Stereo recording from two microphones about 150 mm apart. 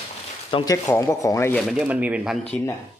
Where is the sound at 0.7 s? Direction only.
20° left (ahead or behind).